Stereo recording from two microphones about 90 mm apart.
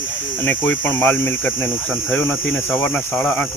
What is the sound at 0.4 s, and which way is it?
Speech, 20° left (ahead or behind).